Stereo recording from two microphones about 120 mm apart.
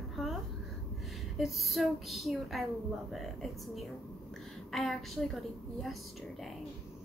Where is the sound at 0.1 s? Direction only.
Centre (ahead or behind).